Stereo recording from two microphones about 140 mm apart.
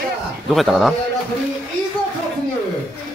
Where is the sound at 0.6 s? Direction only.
Centre (ahead or behind).